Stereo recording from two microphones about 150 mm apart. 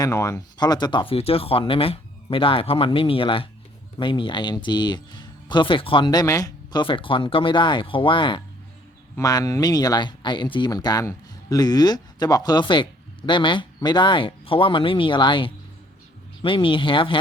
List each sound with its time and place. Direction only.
0.0 s speech: 20° left (ahead or behind)
9.1 s speech: 25° left (ahead or behind)